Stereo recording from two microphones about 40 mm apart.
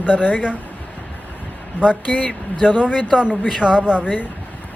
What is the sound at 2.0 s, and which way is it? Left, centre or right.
Speech, left.